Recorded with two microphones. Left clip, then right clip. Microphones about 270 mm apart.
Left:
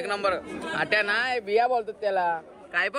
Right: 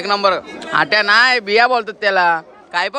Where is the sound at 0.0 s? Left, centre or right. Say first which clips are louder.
Right 11 dB; centre.